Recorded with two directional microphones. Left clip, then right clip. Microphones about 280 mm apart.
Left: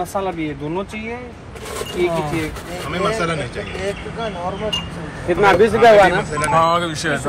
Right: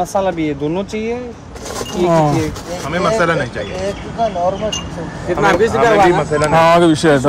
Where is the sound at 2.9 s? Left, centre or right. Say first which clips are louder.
Right 6 dB; right.